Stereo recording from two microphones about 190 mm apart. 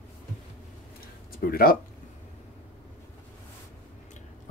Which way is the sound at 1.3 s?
50° left (ahead or behind).